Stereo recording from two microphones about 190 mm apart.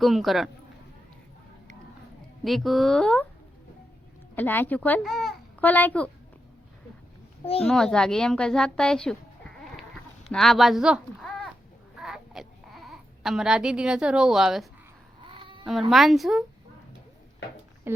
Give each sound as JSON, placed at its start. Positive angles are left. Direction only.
{"t": 0.0, "sound": "speech", "side_deg": 0}
{"t": 2.4, "sound": "speech", "side_deg": 0}
{"t": 4.4, "sound": "a child's voice", "side_deg": 10}
{"t": 7.6, "sound": "a woman's voice", "side_deg": 5}
{"t": 11.9, "sound": "baby cry", "side_deg": 0}
{"t": 15.2, "sound": "a sound", "side_deg": -25}
{"t": 15.9, "sound": "speech", "side_deg": 0}
{"t": 17.9, "sound": "speech", "side_deg": -10}